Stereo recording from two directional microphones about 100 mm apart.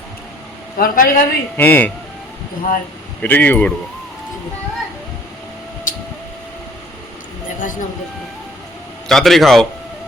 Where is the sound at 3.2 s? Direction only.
15° left (ahead or behind).